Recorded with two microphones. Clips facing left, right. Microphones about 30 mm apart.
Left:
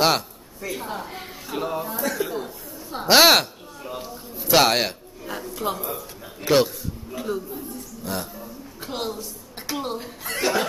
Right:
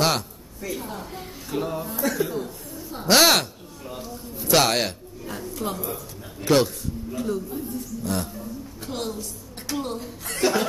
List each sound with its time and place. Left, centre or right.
0.0 s a woman's voice: centre
2.3 s a woman's voice: left
7.5 s a man's voice: centre
8.8 s a woman's voice: centre
10.2 s a man's voice: centre